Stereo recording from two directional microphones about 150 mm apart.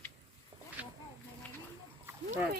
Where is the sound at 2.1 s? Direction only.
15° right (ahead or behind).